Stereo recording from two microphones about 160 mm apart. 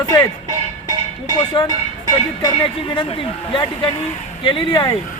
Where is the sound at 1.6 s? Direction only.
30° left (ahead or behind).